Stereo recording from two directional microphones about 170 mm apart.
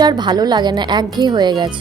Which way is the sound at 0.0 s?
25° right (ahead or behind).